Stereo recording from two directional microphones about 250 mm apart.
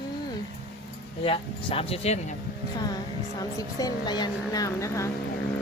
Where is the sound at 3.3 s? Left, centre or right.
Centre.